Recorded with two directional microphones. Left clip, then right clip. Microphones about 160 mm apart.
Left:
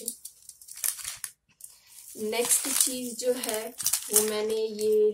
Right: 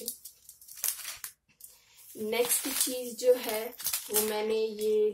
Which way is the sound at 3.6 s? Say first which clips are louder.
Left 3 dB; 35° left (ahead or behind).